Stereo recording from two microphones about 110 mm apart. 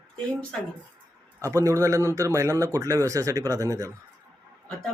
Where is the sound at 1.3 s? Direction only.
30° right (ahead or behind).